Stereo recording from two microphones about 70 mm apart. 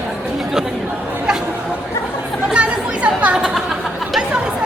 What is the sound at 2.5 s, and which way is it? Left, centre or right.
Chatter, centre.